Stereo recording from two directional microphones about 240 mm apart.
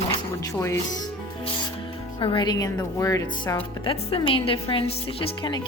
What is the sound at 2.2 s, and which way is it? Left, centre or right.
Speech, left.